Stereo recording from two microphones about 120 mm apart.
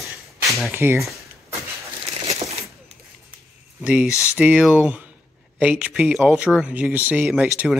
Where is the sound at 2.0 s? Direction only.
60° right (ahead or behind).